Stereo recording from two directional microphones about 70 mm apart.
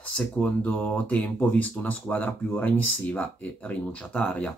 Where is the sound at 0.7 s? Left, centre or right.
Left.